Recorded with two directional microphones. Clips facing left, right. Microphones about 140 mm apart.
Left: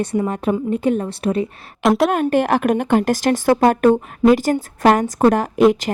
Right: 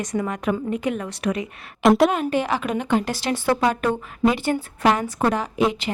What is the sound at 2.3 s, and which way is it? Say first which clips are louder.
A woman's voice: left 7 dB; 50° left (ahead or behind).